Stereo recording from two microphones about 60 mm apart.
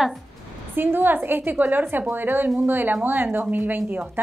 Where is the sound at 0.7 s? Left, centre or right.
Right.